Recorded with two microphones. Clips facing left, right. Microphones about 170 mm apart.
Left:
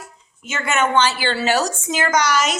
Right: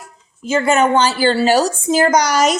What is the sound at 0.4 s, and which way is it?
Speech, 35° right (ahead or behind).